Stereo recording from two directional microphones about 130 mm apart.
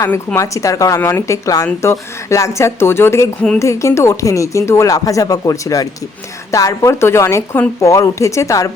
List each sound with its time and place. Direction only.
0.3 s speech: 25° left (ahead or behind)